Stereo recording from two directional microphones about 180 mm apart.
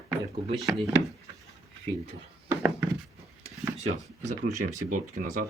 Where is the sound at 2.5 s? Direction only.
10° right (ahead or behind).